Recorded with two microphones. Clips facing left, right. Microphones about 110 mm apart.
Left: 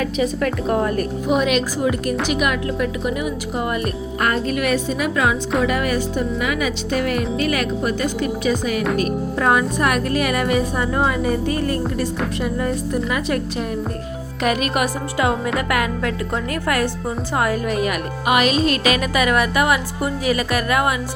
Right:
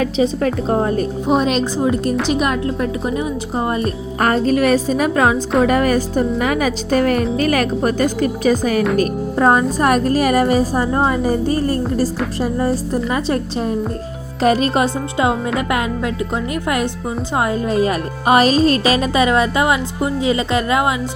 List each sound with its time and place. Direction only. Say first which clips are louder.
0.0 s a woman's voice: right 4 dB; 30° right (ahead or behind)